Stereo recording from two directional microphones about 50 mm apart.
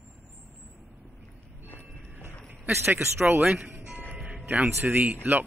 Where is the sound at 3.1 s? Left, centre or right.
Right.